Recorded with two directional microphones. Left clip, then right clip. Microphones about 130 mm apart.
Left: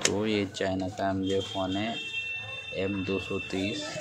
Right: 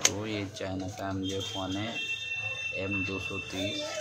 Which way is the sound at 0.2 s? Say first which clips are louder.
Left 6 dB; 35° left (ahead or behind).